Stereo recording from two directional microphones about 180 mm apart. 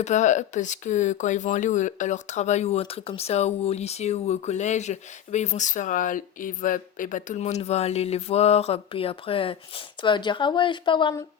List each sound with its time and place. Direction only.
0.0 s speech: 40° left (ahead or behind); by 11.1 s 25° left (ahead or behind)